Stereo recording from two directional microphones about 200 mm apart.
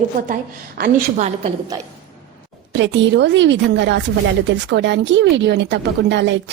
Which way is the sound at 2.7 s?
65° right (ahead or behind).